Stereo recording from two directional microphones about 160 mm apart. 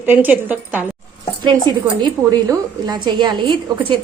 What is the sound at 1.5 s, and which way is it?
A woman's voice, 25° right (ahead or behind).